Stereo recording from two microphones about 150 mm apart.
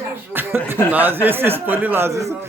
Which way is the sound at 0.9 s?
10° right (ahead or behind).